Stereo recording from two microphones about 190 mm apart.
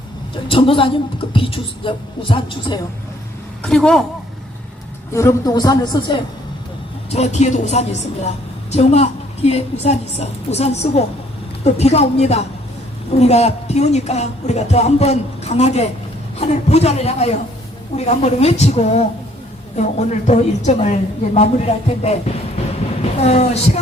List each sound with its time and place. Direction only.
0.4 s speech: 30° left (ahead or behind)
3.6 s a man's voice: 5° left (ahead or behind)
5.1 s speech: 20° left (ahead or behind)
7.1 s a woman's voice: 35° left (ahead or behind)
23.2 s a woman's voice: 35° left (ahead or behind)